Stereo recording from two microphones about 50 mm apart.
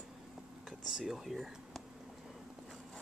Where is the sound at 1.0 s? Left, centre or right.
Centre.